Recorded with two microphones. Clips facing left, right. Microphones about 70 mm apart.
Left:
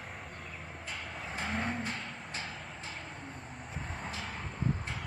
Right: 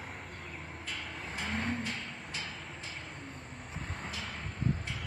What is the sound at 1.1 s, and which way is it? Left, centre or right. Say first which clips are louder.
Vehicle: left 1 dB; centre.